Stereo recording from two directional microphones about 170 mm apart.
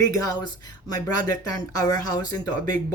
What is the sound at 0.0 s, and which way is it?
Speech, 20° left (ahead or behind).